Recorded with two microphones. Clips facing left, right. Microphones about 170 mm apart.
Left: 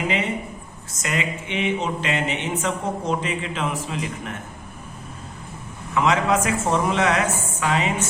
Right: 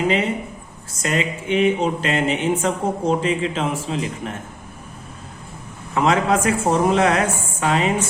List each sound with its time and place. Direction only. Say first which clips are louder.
1.0 s speech: right 4 dB; 35° right (ahead or behind)
5.9 s speech: right 2 dB; 35° right (ahead or behind)